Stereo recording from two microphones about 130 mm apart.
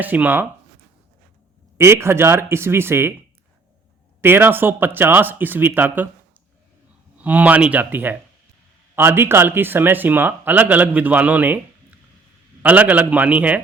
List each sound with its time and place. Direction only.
0.0 s speech: 15° right (ahead or behind)
1.8 s speech: 20° right (ahead or behind)
4.2 s speech: 15° right (ahead or behind)
7.2 s speech: 10° right (ahead or behind)
12.6 s speech: 10° right (ahead or behind)